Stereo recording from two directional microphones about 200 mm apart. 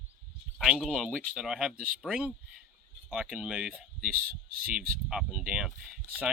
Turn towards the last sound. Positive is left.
turn(degrees=0)  # may be behind; listen again after turning